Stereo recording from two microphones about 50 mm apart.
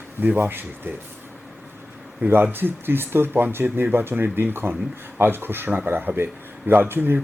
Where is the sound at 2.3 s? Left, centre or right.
Right.